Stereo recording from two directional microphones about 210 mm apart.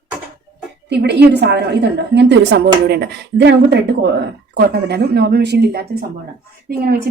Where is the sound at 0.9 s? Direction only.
55° right (ahead or behind).